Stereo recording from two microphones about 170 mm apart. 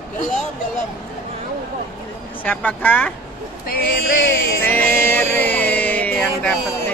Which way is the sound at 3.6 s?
75° left (ahead or behind).